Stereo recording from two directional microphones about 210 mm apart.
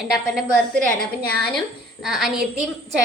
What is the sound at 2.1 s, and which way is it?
Speech, centre (ahead or behind).